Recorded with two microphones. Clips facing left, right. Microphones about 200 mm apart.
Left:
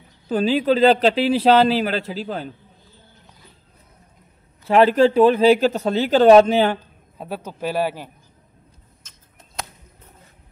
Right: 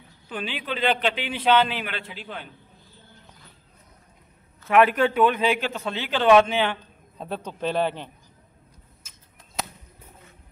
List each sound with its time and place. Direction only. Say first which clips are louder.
0.3 s a man's voice: left 13 dB; 40° left (ahead or behind)
4.6 s a man's voice: left 5 dB; 30° left (ahead or behind)
7.2 s a man's voice: left 2 dB; 5° left (ahead or behind)
9.0 s a sound: left 2 dB; 10° right (ahead or behind)